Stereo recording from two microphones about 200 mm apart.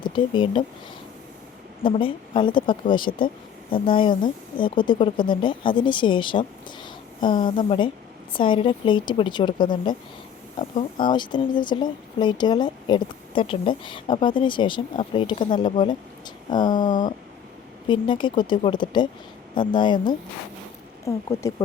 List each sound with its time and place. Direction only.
0.0 s speech: 25° left (ahead or behind)
1.8 s speech: 25° left (ahead or behind)
3.1 s speech: 40° left (ahead or behind)
3.7 s speech: 25° left (ahead or behind)
11.0 s speech: 25° left (ahead or behind)